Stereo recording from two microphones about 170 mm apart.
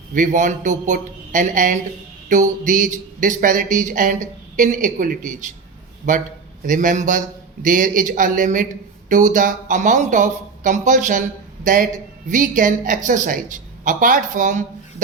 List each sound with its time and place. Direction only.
0.1 s speech: 50° right (ahead or behind)